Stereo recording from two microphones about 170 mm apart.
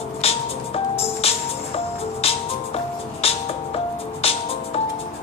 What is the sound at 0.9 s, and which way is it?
Music, 35° left (ahead or behind).